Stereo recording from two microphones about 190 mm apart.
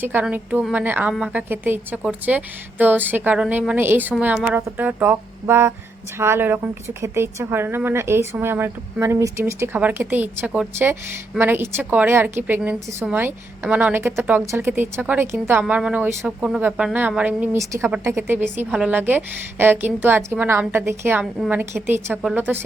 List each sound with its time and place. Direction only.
0.0 s a woman's voice: 10° right (ahead or behind)